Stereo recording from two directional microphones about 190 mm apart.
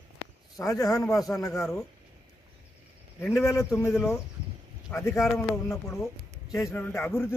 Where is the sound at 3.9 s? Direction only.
Centre (ahead or behind).